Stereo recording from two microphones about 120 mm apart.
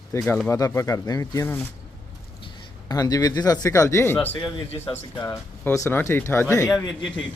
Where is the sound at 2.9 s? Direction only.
30° left (ahead or behind).